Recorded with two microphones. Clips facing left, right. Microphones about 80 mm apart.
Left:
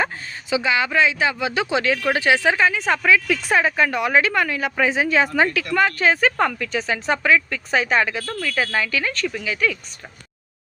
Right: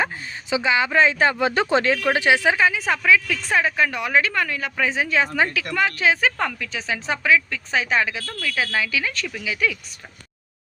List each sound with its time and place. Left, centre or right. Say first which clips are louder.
0.5 s speech: even; right
1.0 s speech: right 2 dB; right
2.0 s a woman's voice: even; right